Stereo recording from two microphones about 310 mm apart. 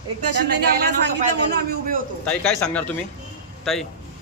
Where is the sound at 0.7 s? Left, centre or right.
Right.